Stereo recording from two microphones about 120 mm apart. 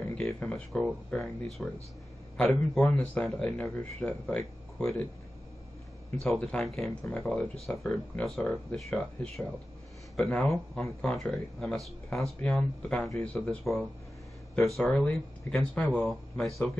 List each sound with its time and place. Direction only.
0.1 s speech: 5° left (ahead or behind)
6.2 s speech: 5° left (ahead or behind)